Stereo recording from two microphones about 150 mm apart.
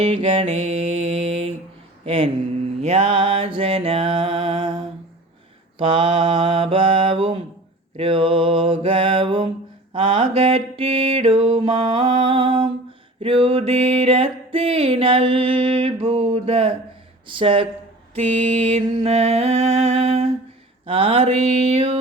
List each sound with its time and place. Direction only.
0.0 s music: 40° right (ahead or behind)
5.8 s music: 35° right (ahead or behind)
18.3 s music: 45° right (ahead or behind)